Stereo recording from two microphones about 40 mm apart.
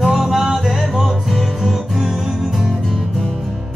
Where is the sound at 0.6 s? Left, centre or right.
Centre.